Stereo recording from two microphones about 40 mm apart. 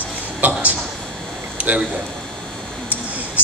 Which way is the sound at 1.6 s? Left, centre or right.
Right.